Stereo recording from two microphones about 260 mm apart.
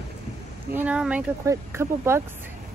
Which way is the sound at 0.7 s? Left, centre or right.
Centre.